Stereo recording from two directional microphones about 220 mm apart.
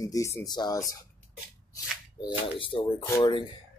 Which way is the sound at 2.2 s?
25° left (ahead or behind).